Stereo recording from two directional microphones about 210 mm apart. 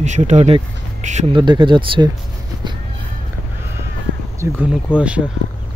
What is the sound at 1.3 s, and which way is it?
Speech, 20° right (ahead or behind).